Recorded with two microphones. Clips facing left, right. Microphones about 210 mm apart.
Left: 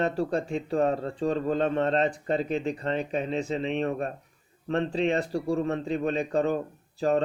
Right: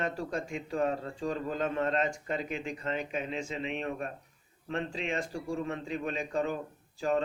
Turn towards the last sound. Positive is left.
turn(degrees=35)  # may be behind; listen again after turning